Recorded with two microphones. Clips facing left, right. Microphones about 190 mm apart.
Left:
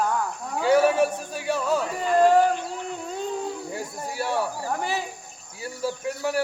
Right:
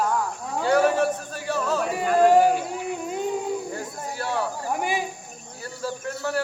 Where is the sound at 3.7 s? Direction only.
10° left (ahead or behind).